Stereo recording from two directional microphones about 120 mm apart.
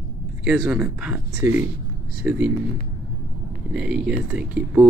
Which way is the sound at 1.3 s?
20° right (ahead or behind).